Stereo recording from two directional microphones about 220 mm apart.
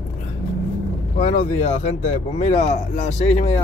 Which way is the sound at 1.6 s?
30° left (ahead or behind).